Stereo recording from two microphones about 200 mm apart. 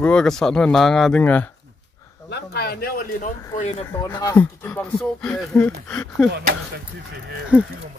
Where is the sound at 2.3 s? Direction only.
55° left (ahead or behind).